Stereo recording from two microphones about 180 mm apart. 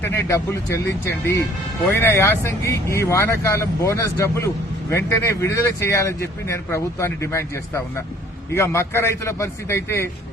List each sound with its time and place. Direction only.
0.0 s speech: 15° left (ahead or behind)